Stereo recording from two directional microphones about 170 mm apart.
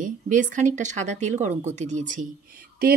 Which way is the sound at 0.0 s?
50° right (ahead or behind).